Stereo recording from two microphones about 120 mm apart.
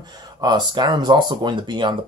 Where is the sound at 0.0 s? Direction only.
35° right (ahead or behind).